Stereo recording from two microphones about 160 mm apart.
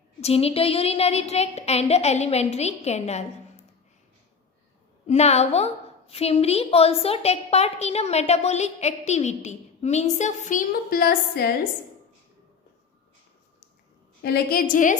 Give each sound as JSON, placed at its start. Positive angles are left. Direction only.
{"t": 0.2, "sound": "a woman's voice", "side_deg": 40}
{"t": 5.0, "sound": "a woman's voice", "side_deg": 45}
{"t": 14.2, "sound": "a woman's voice", "side_deg": 80}